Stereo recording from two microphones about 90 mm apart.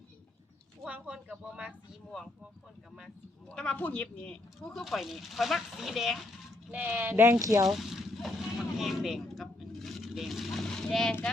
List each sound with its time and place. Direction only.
0.9 s speech: 15° right (ahead or behind)
3.5 s speech: 10° left (ahead or behind)
6.7 s speech: 15° right (ahead or behind)
7.1 s speech: 30° right (ahead or behind)
7.4 s speech: 40° right (ahead or behind)
7.7 s vehicle: 5° right (ahead or behind)